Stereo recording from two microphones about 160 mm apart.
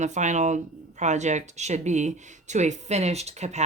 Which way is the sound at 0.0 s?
50° right (ahead or behind).